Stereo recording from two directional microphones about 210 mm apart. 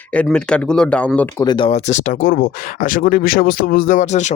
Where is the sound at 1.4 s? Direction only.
25° left (ahead or behind).